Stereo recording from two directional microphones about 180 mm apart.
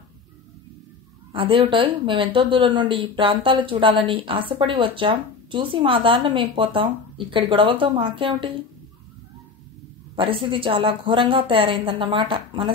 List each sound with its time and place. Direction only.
1.3 s a woman's voice: 30° right (ahead or behind)
10.1 s a woman's voice: 30° right (ahead or behind)